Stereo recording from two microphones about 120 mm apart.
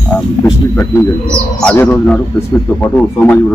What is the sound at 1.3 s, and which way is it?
A man's voice, 10° left (ahead or behind).